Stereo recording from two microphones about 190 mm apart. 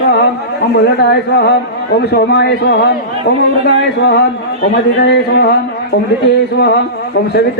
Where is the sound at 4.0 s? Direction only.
65° left (ahead or behind).